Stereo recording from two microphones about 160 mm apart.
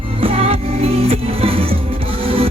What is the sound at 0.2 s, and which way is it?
Music, 35° right (ahead or behind).